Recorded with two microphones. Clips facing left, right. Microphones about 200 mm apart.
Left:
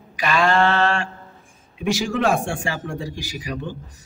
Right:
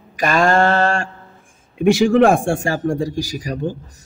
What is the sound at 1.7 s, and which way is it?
Speech, 55° right (ahead or behind).